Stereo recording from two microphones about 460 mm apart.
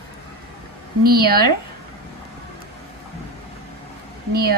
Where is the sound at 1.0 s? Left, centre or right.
Centre.